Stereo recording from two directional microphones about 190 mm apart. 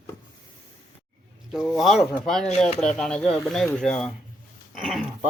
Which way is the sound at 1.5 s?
Centre (ahead or behind).